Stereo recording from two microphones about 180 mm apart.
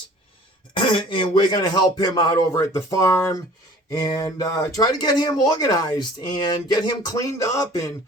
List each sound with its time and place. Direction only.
0.7 s speech: 25° left (ahead or behind)